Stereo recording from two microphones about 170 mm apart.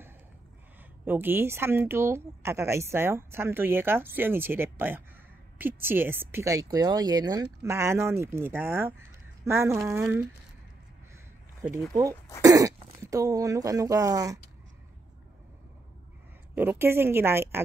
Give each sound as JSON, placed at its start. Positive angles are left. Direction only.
{"t": 1.0, "sound": "a woman's voice", "side_deg": -10}
{"t": 11.7, "sound": "speech", "side_deg": -20}
{"t": 16.5, "sound": "a woman's voice", "side_deg": -10}